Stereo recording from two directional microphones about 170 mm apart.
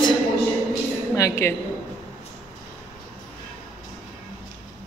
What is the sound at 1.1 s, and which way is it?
Speech, 20° left (ahead or behind).